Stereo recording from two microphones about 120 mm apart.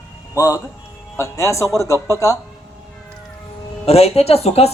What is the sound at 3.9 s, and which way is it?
Speech, 60° left (ahead or behind).